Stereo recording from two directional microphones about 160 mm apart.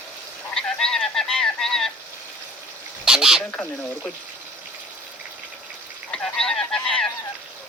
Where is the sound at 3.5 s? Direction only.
5° left (ahead or behind).